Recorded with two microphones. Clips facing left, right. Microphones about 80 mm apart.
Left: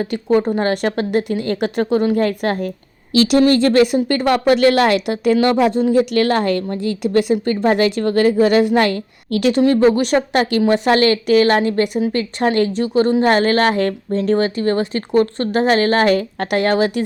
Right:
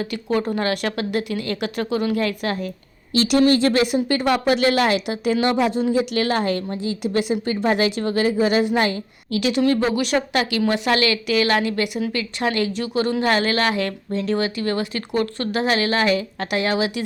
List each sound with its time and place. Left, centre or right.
0.0 s a woman's voice: left